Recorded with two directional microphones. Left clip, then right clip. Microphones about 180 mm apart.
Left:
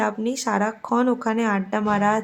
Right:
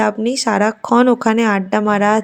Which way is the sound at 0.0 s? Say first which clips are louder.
Right 7 dB; 30° right (ahead or behind).